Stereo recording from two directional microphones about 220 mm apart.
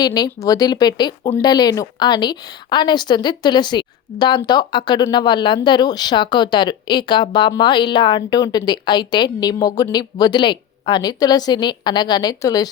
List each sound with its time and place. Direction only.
0.0 s speech: 15° left (ahead or behind)